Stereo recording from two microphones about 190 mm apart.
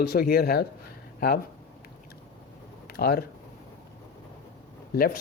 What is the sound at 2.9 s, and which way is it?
Speech, 55° left (ahead or behind).